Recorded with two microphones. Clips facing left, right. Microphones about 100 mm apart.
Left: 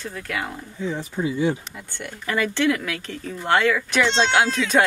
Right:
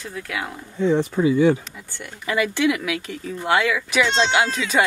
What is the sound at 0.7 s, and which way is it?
Speech, 70° right (ahead or behind).